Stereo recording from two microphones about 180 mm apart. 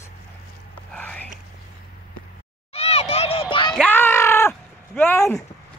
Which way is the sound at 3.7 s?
10° left (ahead or behind).